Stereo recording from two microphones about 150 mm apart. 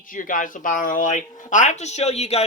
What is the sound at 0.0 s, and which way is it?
Speech, 65° left (ahead or behind).